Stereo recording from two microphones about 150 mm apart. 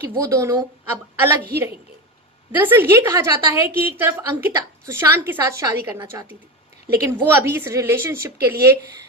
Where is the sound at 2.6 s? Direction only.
15° right (ahead or behind).